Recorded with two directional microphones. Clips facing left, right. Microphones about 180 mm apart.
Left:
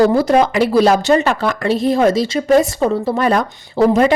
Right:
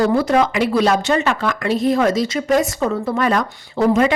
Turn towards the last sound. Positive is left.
turn(degrees=35)  # may be behind; listen again after turning